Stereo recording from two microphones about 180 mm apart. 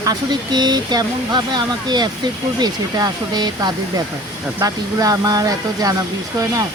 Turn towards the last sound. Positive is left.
turn(degrees=-20)  # may be behind; listen again after turning